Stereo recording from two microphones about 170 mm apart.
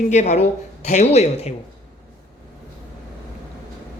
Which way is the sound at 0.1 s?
40° left (ahead or behind).